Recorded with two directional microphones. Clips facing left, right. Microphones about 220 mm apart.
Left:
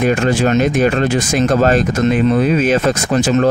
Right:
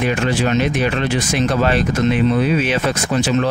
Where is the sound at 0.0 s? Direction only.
45° left (ahead or behind).